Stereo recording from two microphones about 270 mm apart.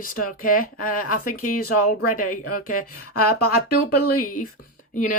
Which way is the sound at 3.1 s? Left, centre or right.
Left.